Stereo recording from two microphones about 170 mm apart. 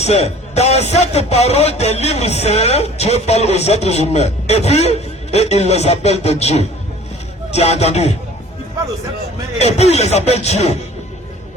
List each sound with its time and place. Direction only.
0.0 s speech: 40° left (ahead or behind)
9.6 s speech: 40° left (ahead or behind)